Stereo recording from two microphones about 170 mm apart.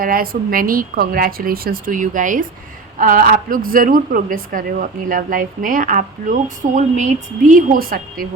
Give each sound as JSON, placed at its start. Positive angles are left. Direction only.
{"t": 0.0, "sound": "a woman's voice", "side_deg": -55}